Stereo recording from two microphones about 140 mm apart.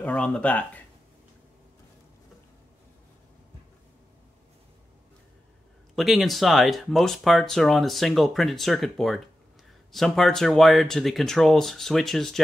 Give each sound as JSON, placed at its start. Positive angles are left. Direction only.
{"t": 0.0, "sound": "speech", "side_deg": 10}
{"t": 5.9, "sound": "speech", "side_deg": 0}